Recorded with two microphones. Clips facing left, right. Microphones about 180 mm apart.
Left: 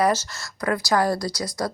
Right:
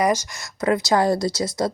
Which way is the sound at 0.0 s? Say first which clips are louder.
Right 1 dB; 15° right (ahead or behind).